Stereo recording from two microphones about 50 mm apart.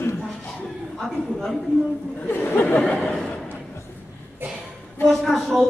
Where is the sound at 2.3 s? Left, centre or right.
Left.